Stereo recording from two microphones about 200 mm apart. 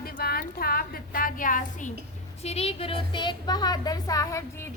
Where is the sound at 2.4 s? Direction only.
30° left (ahead or behind).